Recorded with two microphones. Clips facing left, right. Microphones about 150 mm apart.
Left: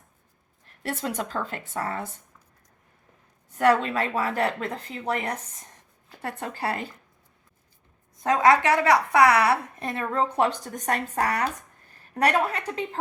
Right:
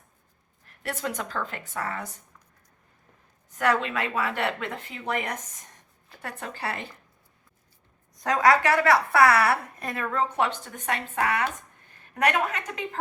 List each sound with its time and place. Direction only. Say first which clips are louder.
0.8 s a woman's voice: left 2 dB; 30° left (ahead or behind)
3.5 s a woman's voice: left 4 dB; 30° left (ahead or behind)
8.1 s a woman's voice: left 2 dB; 25° left (ahead or behind)